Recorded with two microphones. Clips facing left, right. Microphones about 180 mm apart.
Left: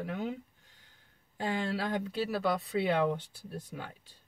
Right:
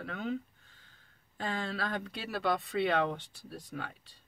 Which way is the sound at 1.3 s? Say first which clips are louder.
Left 3 dB; 15° left (ahead or behind).